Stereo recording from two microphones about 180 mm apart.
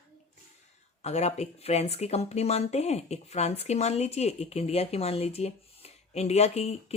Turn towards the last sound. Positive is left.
turn(degrees=35)  # may be behind; listen again after turning